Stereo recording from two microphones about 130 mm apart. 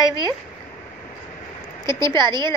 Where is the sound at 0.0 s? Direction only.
35° right (ahead or behind).